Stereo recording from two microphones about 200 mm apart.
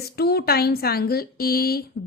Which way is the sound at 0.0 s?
50° left (ahead or behind).